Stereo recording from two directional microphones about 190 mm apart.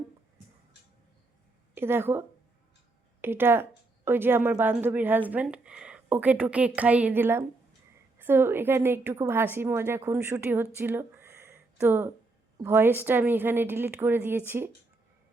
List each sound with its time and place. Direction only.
1.7 s a woman's voice: 10° right (ahead or behind)